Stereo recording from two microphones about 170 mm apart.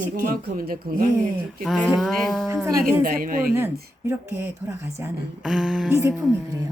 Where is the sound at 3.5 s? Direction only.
15° right (ahead or behind).